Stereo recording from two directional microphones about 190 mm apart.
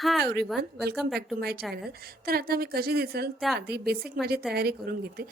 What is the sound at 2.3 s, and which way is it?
A woman's voice, 55° right (ahead or behind).